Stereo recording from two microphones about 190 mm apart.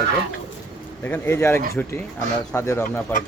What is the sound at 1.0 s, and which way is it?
Speech, 10° left (ahead or behind).